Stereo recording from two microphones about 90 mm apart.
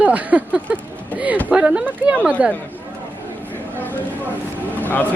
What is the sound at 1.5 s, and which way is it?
A woman's voice, 15° right (ahead or behind).